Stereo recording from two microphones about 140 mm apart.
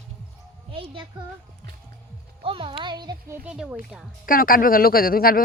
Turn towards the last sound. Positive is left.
turn(degrees=90)